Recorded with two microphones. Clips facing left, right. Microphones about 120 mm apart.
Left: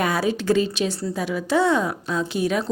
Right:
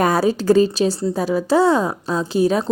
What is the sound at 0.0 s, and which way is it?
A woman's voice, 40° right (ahead or behind).